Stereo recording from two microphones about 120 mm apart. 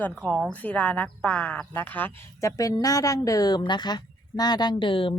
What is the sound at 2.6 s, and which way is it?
A woman's voice, 30° left (ahead or behind).